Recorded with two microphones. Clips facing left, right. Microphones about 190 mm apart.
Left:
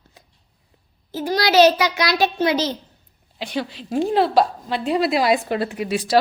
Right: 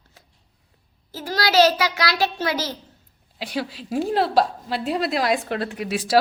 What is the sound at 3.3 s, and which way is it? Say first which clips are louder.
A woman's voice: left 1 dB; 5° right (ahead or behind).